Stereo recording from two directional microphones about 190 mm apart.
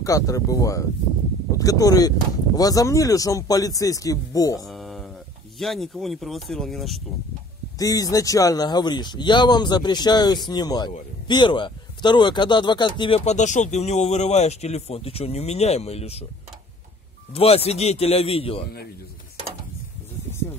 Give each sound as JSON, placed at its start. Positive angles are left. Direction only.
{"t": 0.0, "sound": "speech", "side_deg": 15}
{"t": 4.6, "sound": "a sound", "side_deg": 0}
{"t": 5.6, "sound": "speech", "side_deg": 0}
{"t": 7.8, "sound": "speech", "side_deg": 20}
{"t": 17.3, "sound": "speech", "side_deg": 30}